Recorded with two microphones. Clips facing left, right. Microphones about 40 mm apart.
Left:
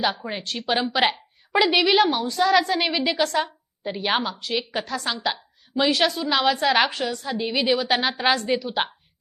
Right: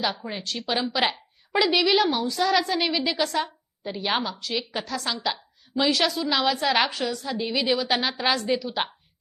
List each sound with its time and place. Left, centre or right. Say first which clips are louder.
0.0 s a woman's voice: left 3 dB; centre